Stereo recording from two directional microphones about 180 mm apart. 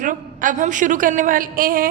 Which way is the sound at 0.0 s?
45° right (ahead or behind).